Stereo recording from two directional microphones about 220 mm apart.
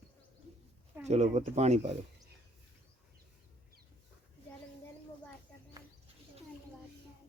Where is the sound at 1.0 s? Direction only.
30° right (ahead or behind).